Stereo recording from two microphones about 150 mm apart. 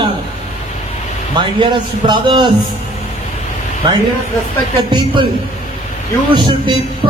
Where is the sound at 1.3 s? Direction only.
30° right (ahead or behind).